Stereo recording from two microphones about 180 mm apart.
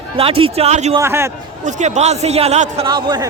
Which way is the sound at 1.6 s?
40° right (ahead or behind).